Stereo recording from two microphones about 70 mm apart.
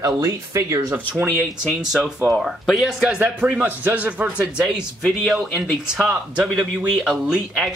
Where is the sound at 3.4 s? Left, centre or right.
Right.